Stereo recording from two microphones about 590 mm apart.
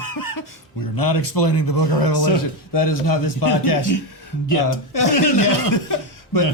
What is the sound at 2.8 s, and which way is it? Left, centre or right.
Speech, left.